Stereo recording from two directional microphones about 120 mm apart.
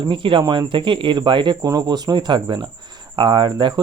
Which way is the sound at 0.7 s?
45° right (ahead or behind).